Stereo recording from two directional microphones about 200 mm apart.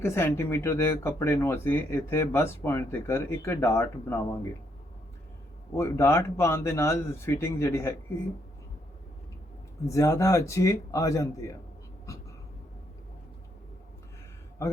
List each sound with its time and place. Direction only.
0.0 s speech: 10° left (ahead or behind)
5.7 s speech: 15° left (ahead or behind)
9.8 s speech: 15° left (ahead or behind)